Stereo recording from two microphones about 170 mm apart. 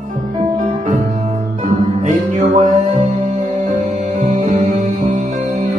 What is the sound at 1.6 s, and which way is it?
Music, 50° right (ahead or behind).